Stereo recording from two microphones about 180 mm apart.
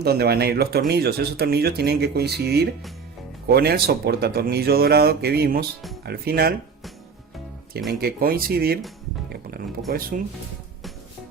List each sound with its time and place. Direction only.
0.0 s speech: 60° right (ahead or behind)
7.9 s speech: 55° right (ahead or behind)
9.3 s music: 60° right (ahead or behind)
10.1 s speech: 50° right (ahead or behind)